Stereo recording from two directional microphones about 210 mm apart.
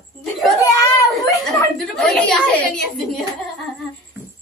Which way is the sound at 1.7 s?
Centre (ahead or behind).